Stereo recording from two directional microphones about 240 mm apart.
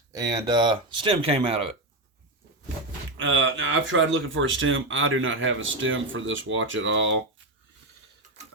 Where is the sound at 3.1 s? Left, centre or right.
Right.